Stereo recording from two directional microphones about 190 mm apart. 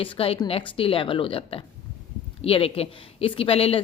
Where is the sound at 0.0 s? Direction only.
30° left (ahead or behind).